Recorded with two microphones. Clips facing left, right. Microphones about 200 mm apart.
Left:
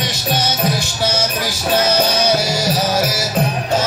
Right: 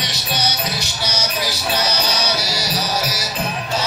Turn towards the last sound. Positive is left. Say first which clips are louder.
# left 6 dB
turn(degrees=50)  # may be behind; listen again after turning